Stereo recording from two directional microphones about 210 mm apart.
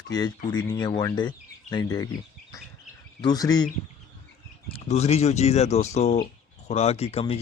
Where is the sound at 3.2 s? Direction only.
20° left (ahead or behind).